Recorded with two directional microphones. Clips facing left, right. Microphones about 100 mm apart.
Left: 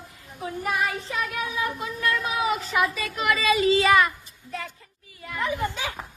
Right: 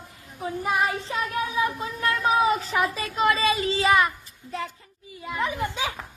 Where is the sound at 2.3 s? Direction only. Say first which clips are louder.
Right 4 dB; 30° right (ahead or behind).